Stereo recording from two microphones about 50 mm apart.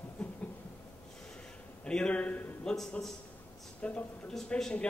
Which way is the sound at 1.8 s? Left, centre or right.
Centre.